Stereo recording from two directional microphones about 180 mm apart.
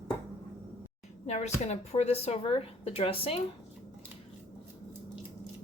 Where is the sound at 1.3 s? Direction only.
40° left (ahead or behind).